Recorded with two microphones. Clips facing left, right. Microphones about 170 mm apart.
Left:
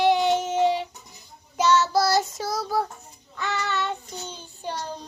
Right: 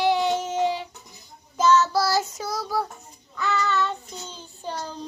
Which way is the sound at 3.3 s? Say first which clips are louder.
Right 3 dB; 20° left (ahead or behind).